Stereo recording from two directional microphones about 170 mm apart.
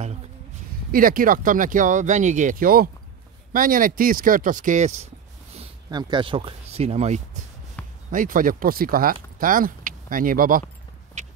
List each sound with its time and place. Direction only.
0.9 s speech: 55° right (ahead or behind); by 5.7 s 40° right (ahead or behind)
5.9 s speech: 25° right (ahead or behind)
7.8 s basketball bounce: 10° left (ahead or behind)
8.1 s speech: 50° right (ahead or behind)
11.2 s a sound: 45° right (ahead or behind)